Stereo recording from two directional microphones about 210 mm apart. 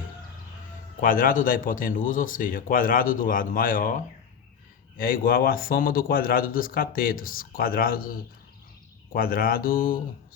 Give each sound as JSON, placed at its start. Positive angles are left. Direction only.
{"t": 1.0, "sound": "a man's voice", "side_deg": 40}